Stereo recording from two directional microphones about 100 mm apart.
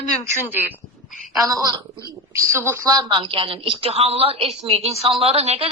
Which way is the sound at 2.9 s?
45° right (ahead or behind).